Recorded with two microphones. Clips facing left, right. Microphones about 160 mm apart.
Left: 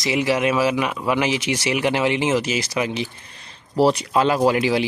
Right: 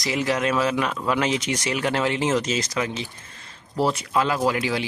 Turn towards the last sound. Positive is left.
turn(degrees=15)  # may be behind; listen again after turning